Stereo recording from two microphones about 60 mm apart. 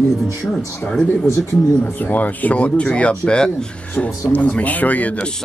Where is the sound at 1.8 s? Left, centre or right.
Left.